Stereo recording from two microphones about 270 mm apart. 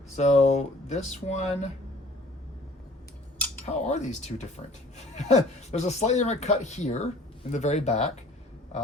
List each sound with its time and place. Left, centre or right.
0.2 s speech: left
3.7 s speech: left